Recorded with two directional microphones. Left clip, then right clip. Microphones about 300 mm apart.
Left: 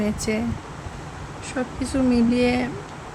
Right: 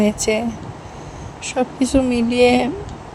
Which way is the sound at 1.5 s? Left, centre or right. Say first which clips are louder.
Right 8 dB; centre.